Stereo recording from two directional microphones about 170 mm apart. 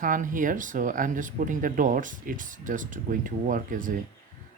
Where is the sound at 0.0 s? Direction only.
50° right (ahead or behind).